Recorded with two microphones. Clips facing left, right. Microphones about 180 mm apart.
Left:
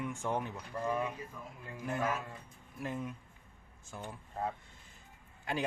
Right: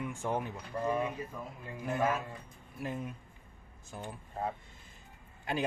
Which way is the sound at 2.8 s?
20° right (ahead or behind).